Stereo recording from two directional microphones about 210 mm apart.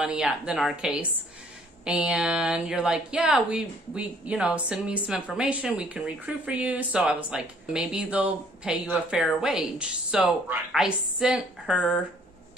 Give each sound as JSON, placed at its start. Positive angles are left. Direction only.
{"t": 0.0, "sound": "speech", "side_deg": -5}